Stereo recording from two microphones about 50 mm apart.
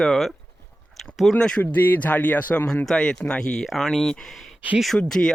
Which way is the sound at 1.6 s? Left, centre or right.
Left.